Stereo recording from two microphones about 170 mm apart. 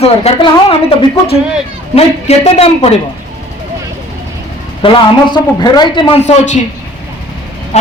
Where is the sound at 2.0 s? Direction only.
40° left (ahead or behind).